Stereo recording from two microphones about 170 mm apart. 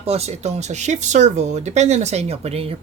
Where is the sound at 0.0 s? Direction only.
35° right (ahead or behind).